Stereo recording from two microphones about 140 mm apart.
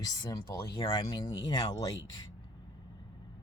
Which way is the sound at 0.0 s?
25° left (ahead or behind).